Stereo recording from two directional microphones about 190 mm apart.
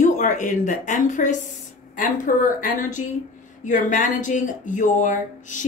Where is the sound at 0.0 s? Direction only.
40° left (ahead or behind).